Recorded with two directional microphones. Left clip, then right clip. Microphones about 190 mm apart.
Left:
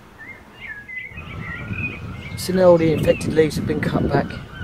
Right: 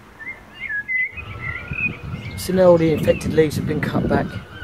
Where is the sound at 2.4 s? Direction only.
15° left (ahead or behind).